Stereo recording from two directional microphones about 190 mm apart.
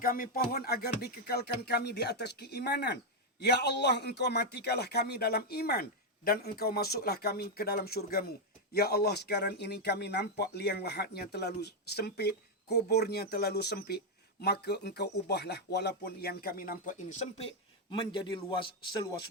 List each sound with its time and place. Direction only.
0.0 s a man's voice: 50° left (ahead or behind); by 19.0 s 25° left (ahead or behind)